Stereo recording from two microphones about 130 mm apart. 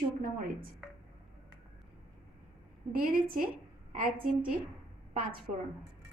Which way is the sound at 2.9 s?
90° right.